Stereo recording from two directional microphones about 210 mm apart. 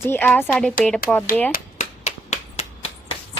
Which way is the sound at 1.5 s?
35° left (ahead or behind).